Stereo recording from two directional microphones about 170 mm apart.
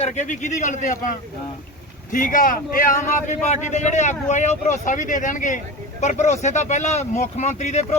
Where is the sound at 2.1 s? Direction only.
50° left (ahead or behind).